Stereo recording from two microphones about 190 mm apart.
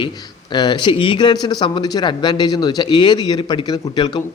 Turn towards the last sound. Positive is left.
turn(degrees=25)  # may be behind; listen again after turning